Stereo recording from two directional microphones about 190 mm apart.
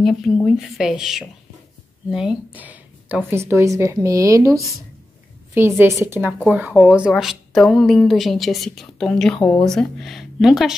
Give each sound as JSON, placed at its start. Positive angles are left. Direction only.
{"t": 0.0, "sound": "a woman's voice", "side_deg": 5}